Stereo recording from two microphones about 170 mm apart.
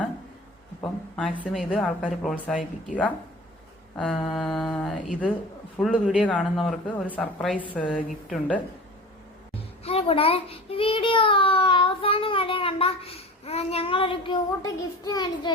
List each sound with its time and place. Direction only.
0.8 s speech: 5° left (ahead or behind)
1.3 s a woman's voice: 10° right (ahead or behind)
1.7 s speech: centre (ahead or behind)
9.8 s a child's voice: 35° left (ahead or behind)